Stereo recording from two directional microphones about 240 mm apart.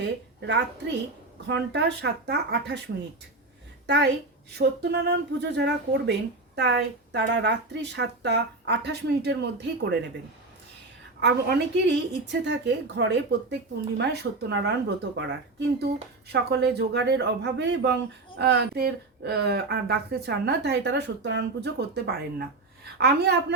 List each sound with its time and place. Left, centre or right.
0.0 s a woman's voice: right
3.8 s speech: right
11.2 s speech: right